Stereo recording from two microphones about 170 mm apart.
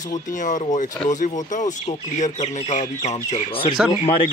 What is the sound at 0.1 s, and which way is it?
Speech, 45° left (ahead or behind).